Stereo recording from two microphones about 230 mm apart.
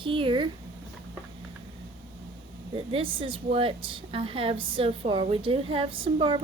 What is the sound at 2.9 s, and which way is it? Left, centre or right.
A woman's voice, right.